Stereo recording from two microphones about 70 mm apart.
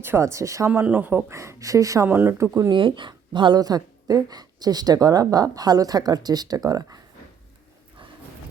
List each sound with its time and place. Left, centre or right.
0.0 s speech: right
0.7 s speech: right
1.3 s speech: right
2.0 s speech: right
2.6 s a woman's voice: right